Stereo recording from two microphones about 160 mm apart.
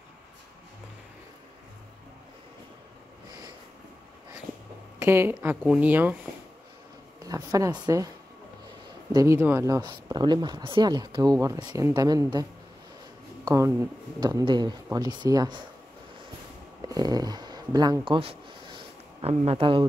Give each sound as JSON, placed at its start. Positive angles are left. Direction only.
{"t": 4.9, "sound": "speech", "side_deg": -15}
{"t": 7.2, "sound": "speech", "side_deg": -20}
{"t": 9.1, "sound": "speech", "side_deg": -20}
{"t": 13.5, "sound": "speech", "side_deg": -15}
{"t": 16.8, "sound": "speech", "side_deg": -25}